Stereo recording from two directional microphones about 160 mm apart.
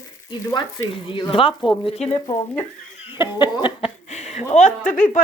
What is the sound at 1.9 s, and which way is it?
Speech, 40° left (ahead or behind).